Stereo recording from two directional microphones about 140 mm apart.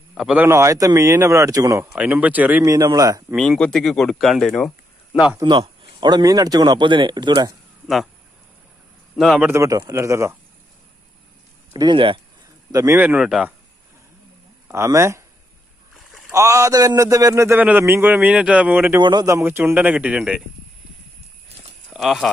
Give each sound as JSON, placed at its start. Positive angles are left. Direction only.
{"t": 0.1, "sound": "a man's voice", "side_deg": -5}
{"t": 0.5, "sound": "speech", "side_deg": -20}
{"t": 1.9, "sound": "a man's voice", "side_deg": -10}
{"t": 2.7, "sound": "speech", "side_deg": -25}
{"t": 3.3, "sound": "speech", "side_deg": 5}
{"t": 5.4, "sound": "a man's voice", "side_deg": -35}
{"t": 9.1, "sound": "a man's voice", "side_deg": 0}
{"t": 9.5, "sound": "speech", "side_deg": -25}
{"t": 11.7, "sound": "a man's voice", "side_deg": -30}
{"t": 12.7, "sound": "a man's voice", "side_deg": -20}
{"t": 14.7, "sound": "speech", "side_deg": -20}
{"t": 16.3, "sound": "a man's voice", "side_deg": -20}
{"t": 19.0, "sound": "a man's voice", "side_deg": -25}
{"t": 21.9, "sound": "speech", "side_deg": 0}